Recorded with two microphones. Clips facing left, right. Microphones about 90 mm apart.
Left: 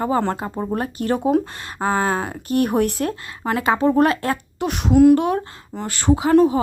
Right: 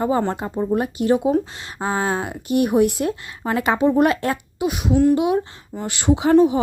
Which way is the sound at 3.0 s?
35° left (ahead or behind).